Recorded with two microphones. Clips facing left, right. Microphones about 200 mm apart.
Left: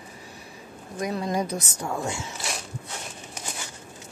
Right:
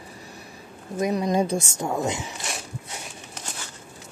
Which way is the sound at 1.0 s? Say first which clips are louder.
Right 4 dB; 20° right (ahead or behind).